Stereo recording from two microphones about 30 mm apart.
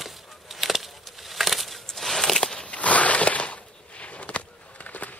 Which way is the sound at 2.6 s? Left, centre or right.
Left.